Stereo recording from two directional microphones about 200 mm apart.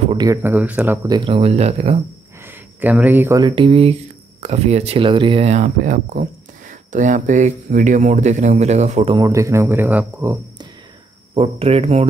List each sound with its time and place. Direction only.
0.2 s speech: 15° right (ahead or behind); by 2.0 s 30° right (ahead or behind)
2.4 s speech: 10° right (ahead or behind); by 9.2 s 30° right (ahead or behind)
9.2 s speech: 15° right (ahead or behind)
11.3 s speech: 30° right (ahead or behind)